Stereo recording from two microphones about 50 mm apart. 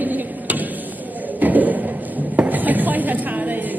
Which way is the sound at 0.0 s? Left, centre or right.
Right.